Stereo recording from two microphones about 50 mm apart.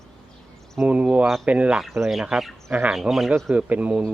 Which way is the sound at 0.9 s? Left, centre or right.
Right.